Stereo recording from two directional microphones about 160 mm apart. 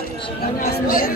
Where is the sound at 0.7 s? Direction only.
65° left (ahead or behind).